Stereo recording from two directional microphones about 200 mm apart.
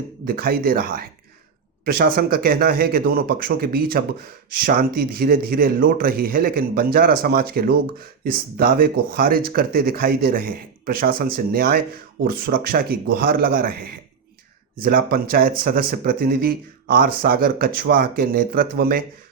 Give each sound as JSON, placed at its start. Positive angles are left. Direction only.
{"t": 0.3, "sound": "speech", "side_deg": -50}